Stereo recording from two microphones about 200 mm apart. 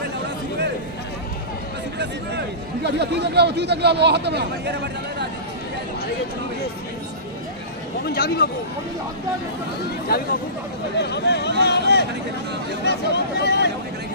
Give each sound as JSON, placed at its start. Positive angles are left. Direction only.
{"t": 2.0, "sound": "speech", "side_deg": -55}
{"t": 8.0, "sound": "speech", "side_deg": 50}
{"t": 9.8, "sound": "speech", "side_deg": 50}